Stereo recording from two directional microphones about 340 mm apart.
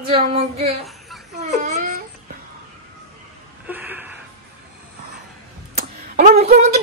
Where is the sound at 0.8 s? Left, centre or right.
Centre.